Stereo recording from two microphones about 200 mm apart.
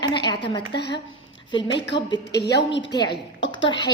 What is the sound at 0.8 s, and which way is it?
Speech, 60° left (ahead or behind).